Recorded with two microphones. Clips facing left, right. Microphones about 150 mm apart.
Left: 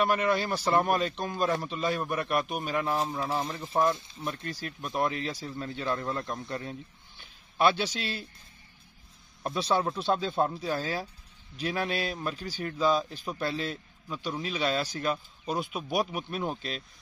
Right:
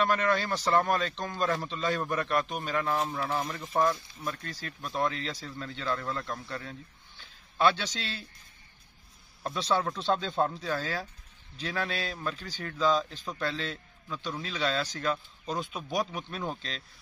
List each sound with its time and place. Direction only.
0.0 s a man's voice: 10° left (ahead or behind)
3.2 s a man's voice: 30° left (ahead or behind); by 8.2 s 10° left (ahead or behind)
9.4 s a man's voice: 15° left (ahead or behind)